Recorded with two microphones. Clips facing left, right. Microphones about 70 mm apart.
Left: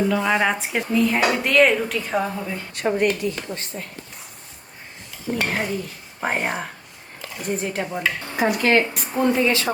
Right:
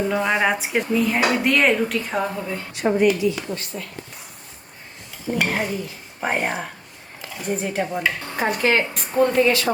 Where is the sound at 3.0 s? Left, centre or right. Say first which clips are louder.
Right 5 dB; left.